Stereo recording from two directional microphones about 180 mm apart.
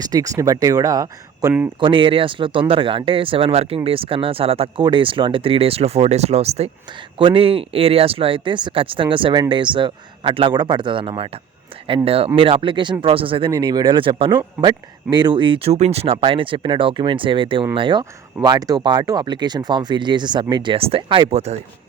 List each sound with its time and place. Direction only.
0.0 s speech: 20° right (ahead or behind); by 21.6 s 35° right (ahead or behind)